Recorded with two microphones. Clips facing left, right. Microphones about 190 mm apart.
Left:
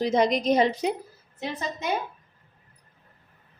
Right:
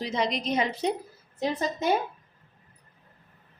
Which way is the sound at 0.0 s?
45° left (ahead or behind).